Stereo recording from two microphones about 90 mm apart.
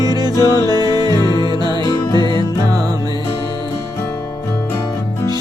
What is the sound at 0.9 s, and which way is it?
Music, 45° right (ahead or behind).